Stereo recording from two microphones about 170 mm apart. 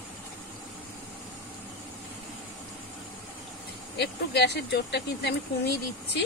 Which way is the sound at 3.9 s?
75° left (ahead or behind).